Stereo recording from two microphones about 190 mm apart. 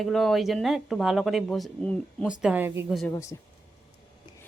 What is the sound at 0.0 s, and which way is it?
Speech, centre (ahead or behind).